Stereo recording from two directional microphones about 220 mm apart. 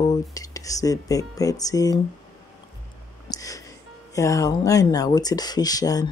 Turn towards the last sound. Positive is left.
turn(degrees=15)  # may be behind; listen again after turning